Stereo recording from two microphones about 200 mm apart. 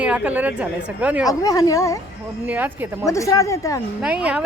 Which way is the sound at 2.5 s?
10° right (ahead or behind).